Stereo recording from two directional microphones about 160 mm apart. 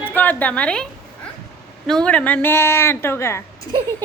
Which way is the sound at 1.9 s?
5° left (ahead or behind).